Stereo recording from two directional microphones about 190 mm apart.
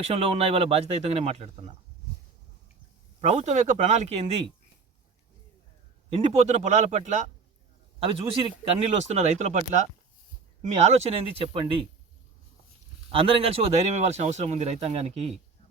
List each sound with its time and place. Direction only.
0.1 s speech: 30° right (ahead or behind)
3.2 s speech: 35° right (ahead or behind)
6.1 s speech: 30° right (ahead or behind)
13.1 s speech: 30° right (ahead or behind)